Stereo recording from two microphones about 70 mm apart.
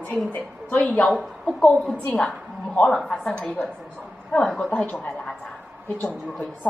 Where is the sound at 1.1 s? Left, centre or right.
Centre.